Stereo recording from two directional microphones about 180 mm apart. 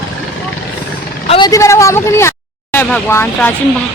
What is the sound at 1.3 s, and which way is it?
Speech, 25° left (ahead or behind).